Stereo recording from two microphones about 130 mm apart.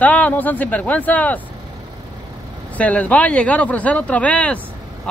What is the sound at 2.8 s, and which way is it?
Speech, 10° left (ahead or behind).